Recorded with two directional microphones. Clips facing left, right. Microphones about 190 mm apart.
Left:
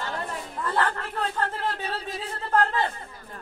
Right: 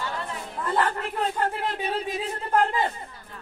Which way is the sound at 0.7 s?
15° right (ahead or behind).